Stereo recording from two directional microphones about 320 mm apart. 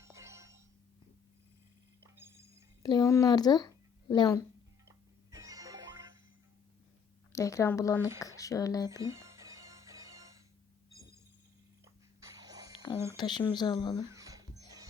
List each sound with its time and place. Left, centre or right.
0.0 s music: centre
2.0 s music: centre
2.8 s speech: centre
4.9 s music: centre
7.3 s speech: centre
9.0 s music: centre
12.2 s a sound: centre
13.1 s speech: centre
14.1 s music: centre